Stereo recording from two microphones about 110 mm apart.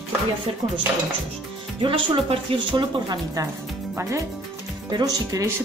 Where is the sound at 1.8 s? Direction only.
50° right (ahead or behind).